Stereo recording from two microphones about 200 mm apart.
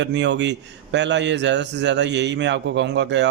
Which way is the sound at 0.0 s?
60° right (ahead or behind).